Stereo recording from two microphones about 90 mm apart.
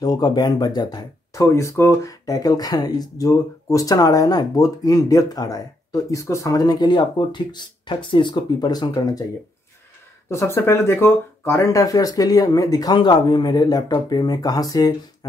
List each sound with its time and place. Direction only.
0.0 s speech: 45° left (ahead or behind)
1.3 s speech: 35° left (ahead or behind); by 8.5 s 60° left (ahead or behind)
8.5 s speech: 50° left (ahead or behind)
10.3 s speech: 30° left (ahead or behind)